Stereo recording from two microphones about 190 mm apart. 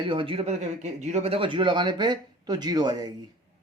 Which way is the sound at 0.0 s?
25° right (ahead or behind).